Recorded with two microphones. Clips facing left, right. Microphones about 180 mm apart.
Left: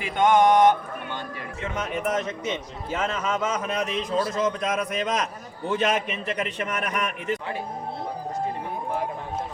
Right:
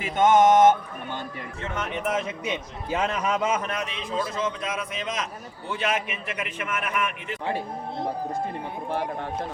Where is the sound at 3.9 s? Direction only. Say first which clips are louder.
Left 4 dB; 40° left (ahead or behind).